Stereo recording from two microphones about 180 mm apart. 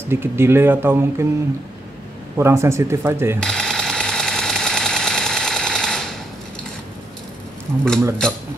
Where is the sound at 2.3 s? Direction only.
15° right (ahead or behind).